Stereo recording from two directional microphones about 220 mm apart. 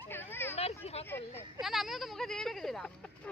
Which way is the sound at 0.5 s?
30° left (ahead or behind).